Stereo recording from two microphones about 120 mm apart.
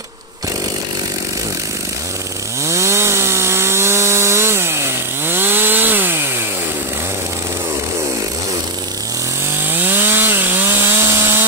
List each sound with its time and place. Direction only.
2.6 s chainsaw: 25° right (ahead or behind)
9.7 s chainsaw: 15° right (ahead or behind)